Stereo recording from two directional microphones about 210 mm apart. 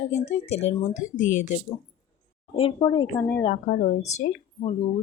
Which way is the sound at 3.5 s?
35° left (ahead or behind).